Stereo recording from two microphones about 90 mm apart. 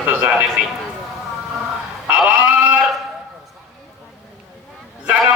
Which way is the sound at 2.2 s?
15° right (ahead or behind).